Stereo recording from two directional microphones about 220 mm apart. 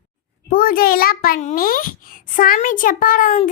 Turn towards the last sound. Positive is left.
turn(degrees=35)  # may be behind; listen again after turning